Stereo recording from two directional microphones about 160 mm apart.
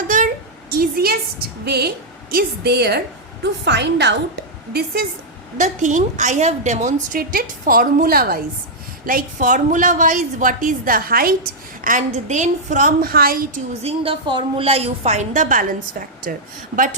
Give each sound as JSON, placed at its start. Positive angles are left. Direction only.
{"t": 0.8, "sound": "a sound", "side_deg": -70}
{"t": 1.6, "sound": "a woman's voice", "side_deg": -90}
{"t": 5.5, "sound": "a woman's voice", "side_deg": -50}
{"t": 11.8, "sound": "a woman's voice", "side_deg": -55}
{"t": 13.8, "sound": "a woman's voice", "side_deg": -35}